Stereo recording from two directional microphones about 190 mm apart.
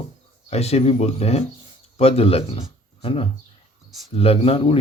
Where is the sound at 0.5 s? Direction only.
35° left (ahead or behind).